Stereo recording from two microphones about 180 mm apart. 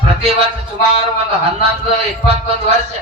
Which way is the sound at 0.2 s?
35° right (ahead or behind).